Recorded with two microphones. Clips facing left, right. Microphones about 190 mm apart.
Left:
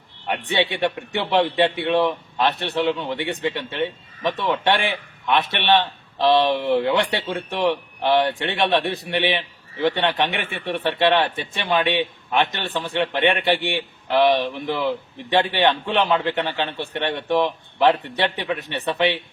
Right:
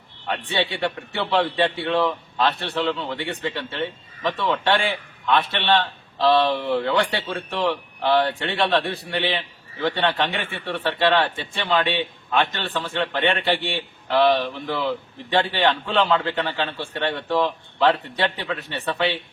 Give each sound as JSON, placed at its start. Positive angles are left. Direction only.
{"t": 0.3, "sound": "speech", "side_deg": 15}